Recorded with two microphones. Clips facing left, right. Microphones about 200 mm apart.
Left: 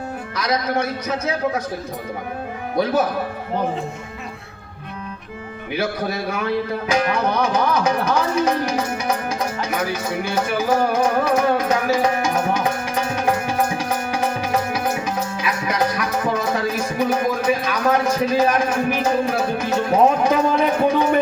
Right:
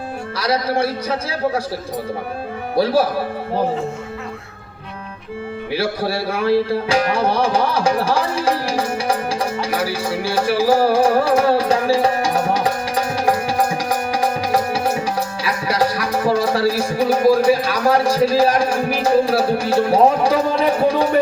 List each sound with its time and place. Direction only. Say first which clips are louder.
0.3 s a man's voice: right 2 dB; 30° right (ahead or behind)
2.7 s a man's voice: right 3 dB; 30° right (ahead or behind)
5.7 s music: right 2 dB; 30° right (ahead or behind)